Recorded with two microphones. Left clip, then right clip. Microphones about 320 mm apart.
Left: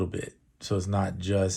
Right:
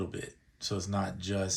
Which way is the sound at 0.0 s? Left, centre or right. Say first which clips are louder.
Left 6 dB; centre.